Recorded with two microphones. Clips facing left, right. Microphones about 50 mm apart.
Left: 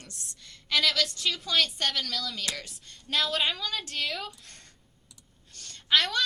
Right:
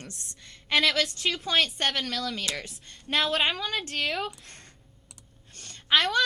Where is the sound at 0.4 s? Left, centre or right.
Right.